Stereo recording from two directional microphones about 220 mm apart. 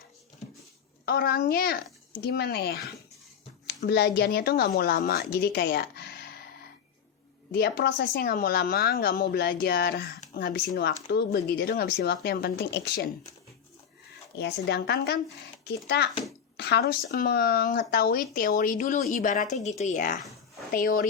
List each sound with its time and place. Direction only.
1.0 s speech: 45° left (ahead or behind)
7.5 s speech: 45° left (ahead or behind)
14.3 s speech: 50° left (ahead or behind)